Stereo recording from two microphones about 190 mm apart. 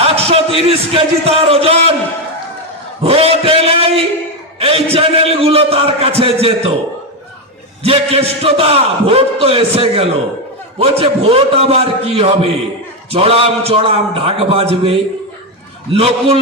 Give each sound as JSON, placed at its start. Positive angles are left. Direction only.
{"t": 0.0, "sound": "speech", "side_deg": -30}
{"t": 3.0, "sound": "a man's voice", "side_deg": -30}
{"t": 7.9, "sound": "a man's voice", "side_deg": -30}